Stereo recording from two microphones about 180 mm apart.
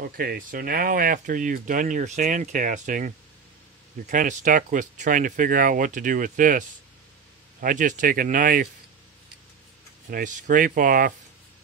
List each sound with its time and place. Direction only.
0.0 s speech: 55° right (ahead or behind)
7.6 s speech: 45° right (ahead or behind)
10.0 s speech: 45° right (ahead or behind)